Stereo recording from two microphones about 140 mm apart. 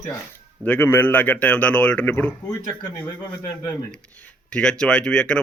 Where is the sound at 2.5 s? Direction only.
25° left (ahead or behind).